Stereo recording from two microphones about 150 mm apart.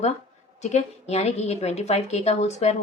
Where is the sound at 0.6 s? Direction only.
50° left (ahead or behind).